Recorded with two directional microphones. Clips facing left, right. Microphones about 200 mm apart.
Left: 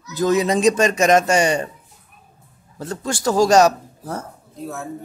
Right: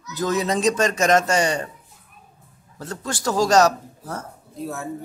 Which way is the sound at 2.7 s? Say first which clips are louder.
Left 4 dB; 15° left (ahead or behind).